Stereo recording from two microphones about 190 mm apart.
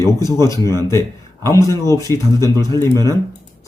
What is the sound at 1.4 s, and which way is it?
Speech, 15° left (ahead or behind).